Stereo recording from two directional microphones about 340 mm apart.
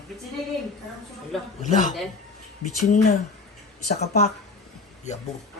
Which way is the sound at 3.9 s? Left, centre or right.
Centre.